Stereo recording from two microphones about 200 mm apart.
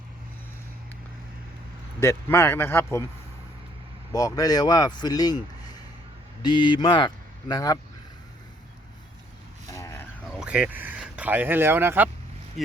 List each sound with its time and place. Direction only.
2.0 s speech: 15° left (ahead or behind)
4.1 s speech: 15° left (ahead or behind)
6.4 s speech: 25° left (ahead or behind)
9.6 s vehicle: 15° left (ahead or behind)
10.3 s speech: 5° right (ahead or behind)
12.6 s speech: centre (ahead or behind)